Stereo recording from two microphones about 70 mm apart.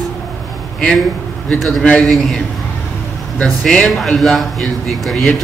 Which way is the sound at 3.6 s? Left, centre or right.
Centre.